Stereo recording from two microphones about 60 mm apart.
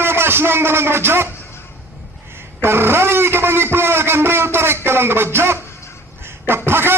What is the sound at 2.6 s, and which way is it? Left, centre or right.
A man's voice, right.